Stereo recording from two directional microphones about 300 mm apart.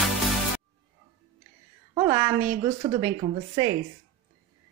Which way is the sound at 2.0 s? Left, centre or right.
Centre.